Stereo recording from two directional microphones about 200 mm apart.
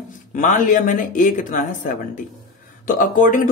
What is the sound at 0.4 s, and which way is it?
Speech, 40° left (ahead or behind).